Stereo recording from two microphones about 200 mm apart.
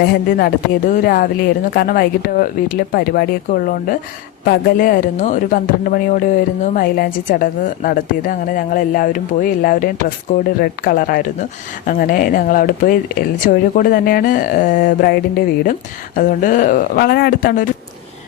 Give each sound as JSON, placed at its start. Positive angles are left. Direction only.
{"t": 0.0, "sound": "a woman's voice", "side_deg": 50}